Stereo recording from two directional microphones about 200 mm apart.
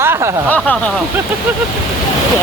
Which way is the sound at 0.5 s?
5° left (ahead or behind).